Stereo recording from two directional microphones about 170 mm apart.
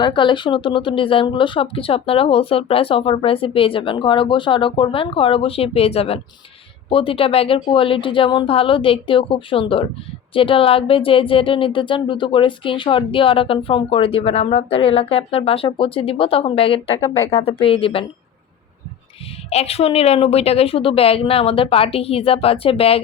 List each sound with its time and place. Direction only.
0.0 s speech: 30° left (ahead or behind)
19.5 s speech: 35° left (ahead or behind)